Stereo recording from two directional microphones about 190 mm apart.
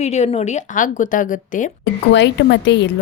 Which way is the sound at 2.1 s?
65° left (ahead or behind).